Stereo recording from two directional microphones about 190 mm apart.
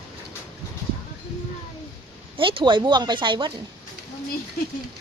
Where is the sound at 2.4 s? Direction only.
25° right (ahead or behind).